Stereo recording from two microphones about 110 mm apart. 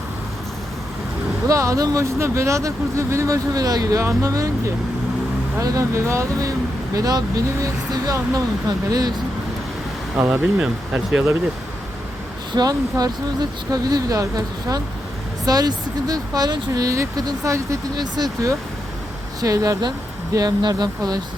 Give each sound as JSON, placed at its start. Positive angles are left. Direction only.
{"t": 1.5, "sound": "speech", "side_deg": -30}
{"t": 10.2, "sound": "speech", "side_deg": -15}
{"t": 12.5, "sound": "speech", "side_deg": -35}